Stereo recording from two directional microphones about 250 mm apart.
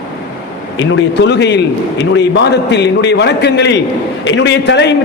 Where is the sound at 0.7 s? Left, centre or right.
Left.